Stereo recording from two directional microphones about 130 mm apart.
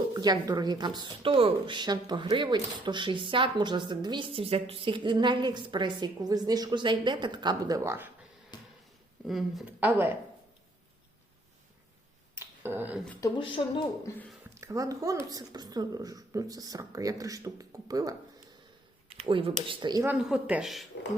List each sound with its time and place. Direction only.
0.1 s speech: 30° right (ahead or behind)
8.5 s a sound: 35° left (ahead or behind)
9.2 s speech: centre (ahead or behind)
9.6 s speech: 15° right (ahead or behind)
12.3 s a sound: 20° right (ahead or behind)
13.4 s speech: 40° left (ahead or behind)
14.6 s speech: 25° right (ahead or behind)
19.2 s speech: 40° right (ahead or behind)
20.1 s speech: 5° right (ahead or behind)